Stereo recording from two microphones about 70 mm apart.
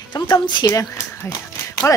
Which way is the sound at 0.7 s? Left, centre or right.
Left.